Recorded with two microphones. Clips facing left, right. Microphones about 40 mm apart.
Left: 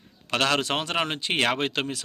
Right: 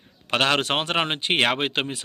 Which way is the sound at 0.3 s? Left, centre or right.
Right.